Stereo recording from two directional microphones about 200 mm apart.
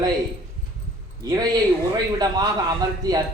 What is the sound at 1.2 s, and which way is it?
Speech, 20° right (ahead or behind).